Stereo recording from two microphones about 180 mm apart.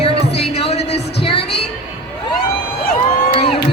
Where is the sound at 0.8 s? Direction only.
70° left (ahead or behind).